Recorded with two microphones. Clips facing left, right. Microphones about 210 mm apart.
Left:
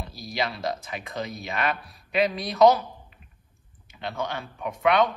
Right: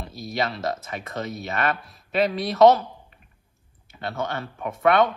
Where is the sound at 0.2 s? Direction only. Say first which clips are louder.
Right 3 dB; centre (ahead or behind).